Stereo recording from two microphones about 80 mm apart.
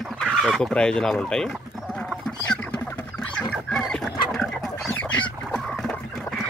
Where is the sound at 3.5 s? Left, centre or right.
Centre.